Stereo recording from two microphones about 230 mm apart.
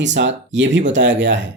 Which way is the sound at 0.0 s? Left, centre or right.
Right.